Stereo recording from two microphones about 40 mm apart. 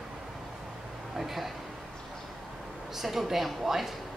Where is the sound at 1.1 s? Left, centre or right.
Centre.